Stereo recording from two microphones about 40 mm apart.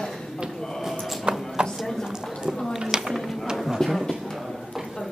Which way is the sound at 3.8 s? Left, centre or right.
Centre.